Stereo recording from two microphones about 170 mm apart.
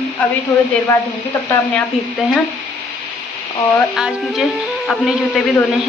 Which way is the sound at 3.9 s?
Centre (ahead or behind).